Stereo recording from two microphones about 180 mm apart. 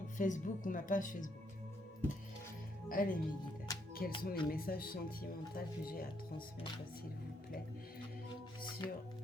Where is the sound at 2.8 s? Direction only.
50° left (ahead or behind).